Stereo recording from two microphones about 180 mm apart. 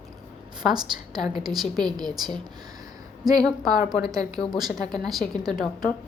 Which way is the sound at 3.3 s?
20° right (ahead or behind).